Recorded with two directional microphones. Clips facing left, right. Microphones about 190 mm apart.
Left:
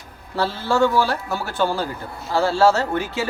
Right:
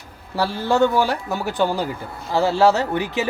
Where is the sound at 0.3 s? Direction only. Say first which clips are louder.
Right 1 dB; 15° right (ahead or behind).